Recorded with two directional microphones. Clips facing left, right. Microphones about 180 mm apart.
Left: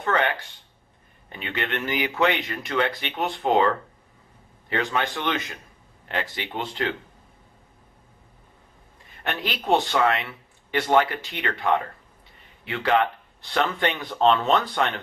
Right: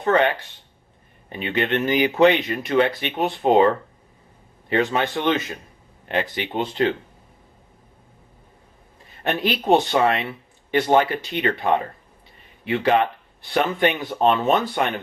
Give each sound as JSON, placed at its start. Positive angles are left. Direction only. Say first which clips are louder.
{"t": 0.0, "sound": "speech", "louder": "right 5 dB", "side_deg": -20}
{"t": 9.2, "sound": "speech", "louder": "right 6 dB", "side_deg": -20}